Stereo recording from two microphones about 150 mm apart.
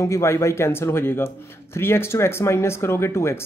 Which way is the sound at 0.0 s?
20° left (ahead or behind).